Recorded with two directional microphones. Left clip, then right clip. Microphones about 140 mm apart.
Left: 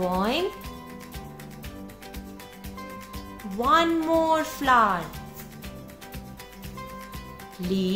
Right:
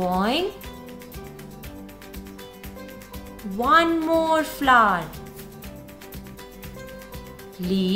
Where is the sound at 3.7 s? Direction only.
20° left (ahead or behind).